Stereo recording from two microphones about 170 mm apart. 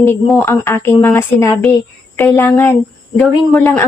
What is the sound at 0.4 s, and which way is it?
Speech, 15° left (ahead or behind).